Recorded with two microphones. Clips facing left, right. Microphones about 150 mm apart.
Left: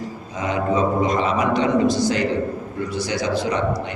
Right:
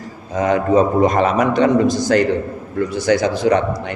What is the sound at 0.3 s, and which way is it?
A man's voice, 50° right (ahead or behind).